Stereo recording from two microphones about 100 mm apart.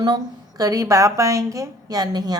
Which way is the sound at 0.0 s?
45° right (ahead or behind).